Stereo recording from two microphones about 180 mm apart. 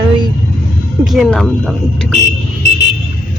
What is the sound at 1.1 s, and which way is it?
Speech, centre (ahead or behind).